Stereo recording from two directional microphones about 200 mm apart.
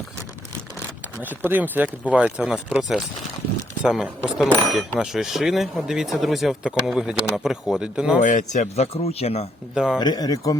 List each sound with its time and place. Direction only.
1.2 s speech: 10° right (ahead or behind)
8.2 s speech: 40° left (ahead or behind)
9.7 s speech: 5° right (ahead or behind)
10.0 s speech: 20° left (ahead or behind)